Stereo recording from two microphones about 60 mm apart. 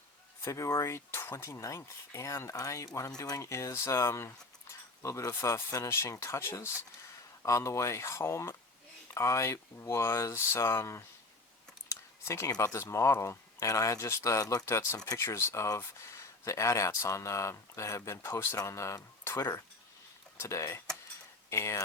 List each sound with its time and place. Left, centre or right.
0.4 s speech: left
3.2 s speech: left
5.0 s speech: left
7.4 s speech: left
11.9 s a sound: left
12.6 s speech: left
14.7 s speech: left
14.9 s speech: left
15.2 s speech: left